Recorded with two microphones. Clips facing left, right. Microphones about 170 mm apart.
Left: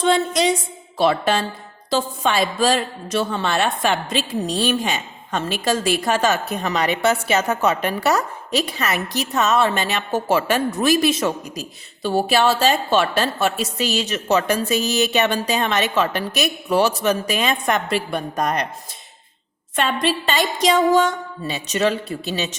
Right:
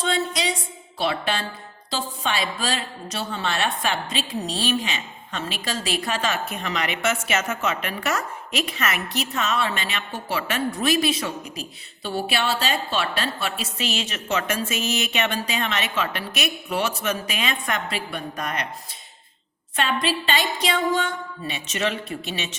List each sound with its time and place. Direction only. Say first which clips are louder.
0.0 s a sound: left 7 dB; 50° left (ahead or behind)
2.0 s a woman's voice: left 6 dB; 50° left (ahead or behind)
20.0 s a woman's voice: left 4 dB; 45° left (ahead or behind)